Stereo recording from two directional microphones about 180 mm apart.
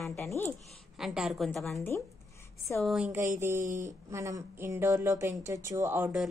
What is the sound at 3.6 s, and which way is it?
Speech, 45° right (ahead or behind).